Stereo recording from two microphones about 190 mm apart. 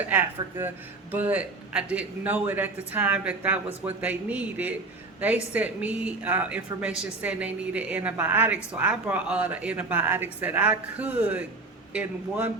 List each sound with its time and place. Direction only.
0.1 s a woman's voice: 10° right (ahead or behind)